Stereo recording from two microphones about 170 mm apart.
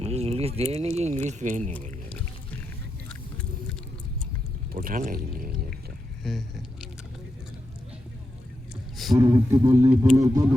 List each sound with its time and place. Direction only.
0.0 s a sound: 40° right (ahead or behind)
1.2 s speech: 45° right (ahead or behind)
2.0 s vehicle: 10° left (ahead or behind)
4.7 s speech: 55° right (ahead or behind)
6.3 s speech: centre (ahead or behind)
9.1 s speech: 15° right (ahead or behind)